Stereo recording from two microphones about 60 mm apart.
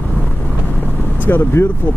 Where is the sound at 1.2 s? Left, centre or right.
Left.